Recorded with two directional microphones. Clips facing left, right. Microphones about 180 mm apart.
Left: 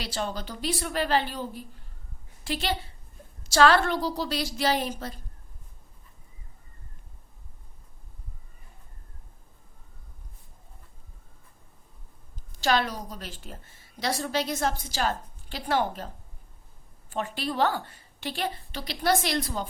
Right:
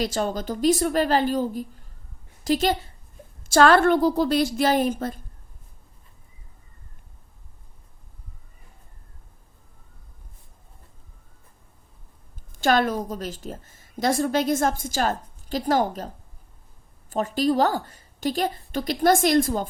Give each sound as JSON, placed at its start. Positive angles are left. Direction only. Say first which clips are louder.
{"t": 0.0, "sound": "a woman's voice", "louder": "right 7 dB", "side_deg": -45}
{"t": 12.5, "sound": "a woman's voice", "louder": "right 5 dB", "side_deg": -50}